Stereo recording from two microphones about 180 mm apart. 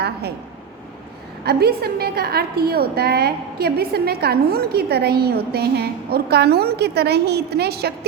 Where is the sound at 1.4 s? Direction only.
60° right (ahead or behind).